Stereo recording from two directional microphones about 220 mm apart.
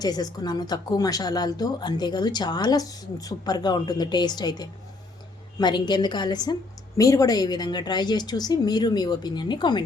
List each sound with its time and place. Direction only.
0.0 s a woman's voice: 15° left (ahead or behind)